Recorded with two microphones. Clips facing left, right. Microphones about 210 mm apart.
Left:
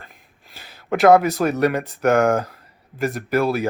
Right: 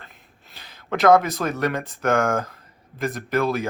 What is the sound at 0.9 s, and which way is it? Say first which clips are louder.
Speech: left 3 dB; 40° left (ahead or behind).